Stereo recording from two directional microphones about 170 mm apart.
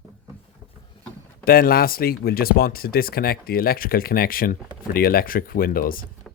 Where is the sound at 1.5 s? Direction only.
60° left (ahead or behind).